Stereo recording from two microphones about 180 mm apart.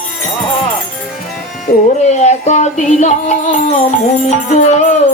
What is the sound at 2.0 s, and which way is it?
Music, 40° left (ahead or behind).